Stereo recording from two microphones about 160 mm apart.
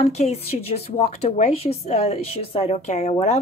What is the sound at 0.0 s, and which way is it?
A woman's voice, 45° left (ahead or behind).